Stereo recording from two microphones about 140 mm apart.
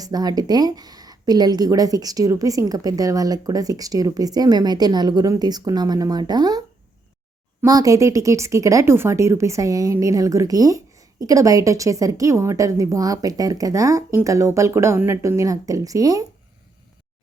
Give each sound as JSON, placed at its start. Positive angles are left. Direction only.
{"t": 0.0, "sound": "speech", "side_deg": -30}
{"t": 7.6, "sound": "speech", "side_deg": -25}